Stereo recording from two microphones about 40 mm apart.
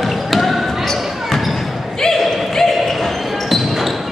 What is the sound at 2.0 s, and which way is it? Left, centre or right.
Basketball bounce, centre.